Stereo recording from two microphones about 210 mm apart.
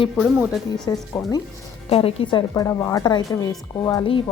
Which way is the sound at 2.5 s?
15° left (ahead or behind).